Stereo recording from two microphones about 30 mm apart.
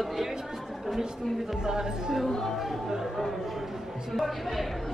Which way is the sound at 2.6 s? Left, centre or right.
Centre.